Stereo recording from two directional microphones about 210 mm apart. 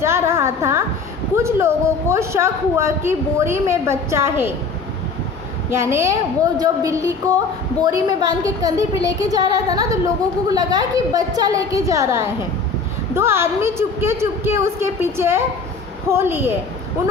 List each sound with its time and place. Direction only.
0.0 s a sound: 10° right (ahead or behind)
1.4 s a woman's voice: 10° right (ahead or behind)
5.7 s a woman's voice: 10° right (ahead or behind)